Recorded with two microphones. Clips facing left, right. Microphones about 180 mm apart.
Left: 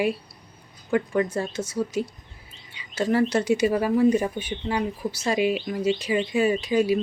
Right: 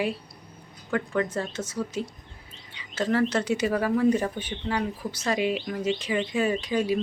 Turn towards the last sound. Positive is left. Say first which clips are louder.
# left 4 dB
turn(degrees=10)  # may be behind; listen again after turning